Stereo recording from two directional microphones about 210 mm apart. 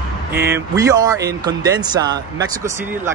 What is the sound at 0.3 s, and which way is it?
Speech, 10° right (ahead or behind).